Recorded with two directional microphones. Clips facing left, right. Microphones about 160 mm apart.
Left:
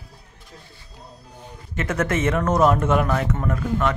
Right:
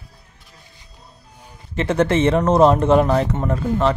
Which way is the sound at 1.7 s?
30° right (ahead or behind).